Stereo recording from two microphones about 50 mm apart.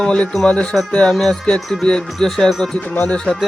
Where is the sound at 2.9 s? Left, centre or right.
Left.